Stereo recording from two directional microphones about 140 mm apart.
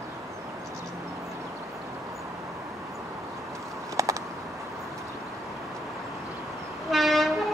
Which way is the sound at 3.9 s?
25° right (ahead or behind).